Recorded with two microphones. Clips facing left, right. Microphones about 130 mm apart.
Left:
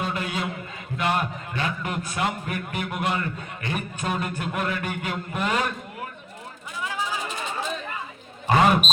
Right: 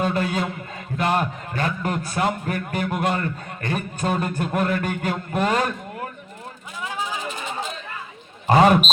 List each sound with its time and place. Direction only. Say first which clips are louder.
0.0 s a man's voice: right 5 dB; 40° right (ahead or behind)